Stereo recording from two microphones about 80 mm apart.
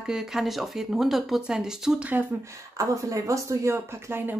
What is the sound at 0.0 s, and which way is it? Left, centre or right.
Speech, centre.